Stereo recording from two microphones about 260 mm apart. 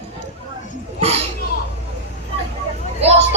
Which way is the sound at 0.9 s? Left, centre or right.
Right.